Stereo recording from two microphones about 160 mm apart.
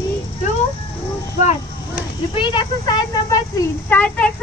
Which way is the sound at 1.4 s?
45° left (ahead or behind).